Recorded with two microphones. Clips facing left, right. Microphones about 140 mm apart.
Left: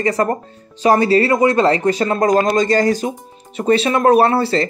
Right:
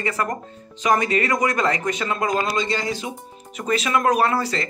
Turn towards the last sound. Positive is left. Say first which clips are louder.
# left 7 dB
turn(degrees=30)  # may be behind; listen again after turning